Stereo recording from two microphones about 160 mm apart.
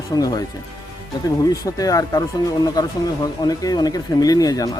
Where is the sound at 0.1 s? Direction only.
25° left (ahead or behind).